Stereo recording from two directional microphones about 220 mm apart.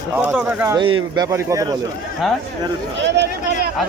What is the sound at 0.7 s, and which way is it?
Speech, 20° right (ahead or behind).